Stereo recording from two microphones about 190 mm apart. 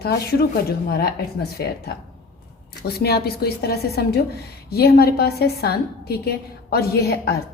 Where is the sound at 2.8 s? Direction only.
55° left (ahead or behind).